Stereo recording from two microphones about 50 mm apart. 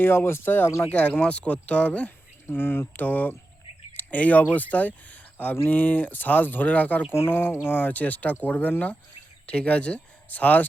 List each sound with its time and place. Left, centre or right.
0.0 s speech: left
0.9 s speech: left
2.5 s speech: left
7.1 s speech: left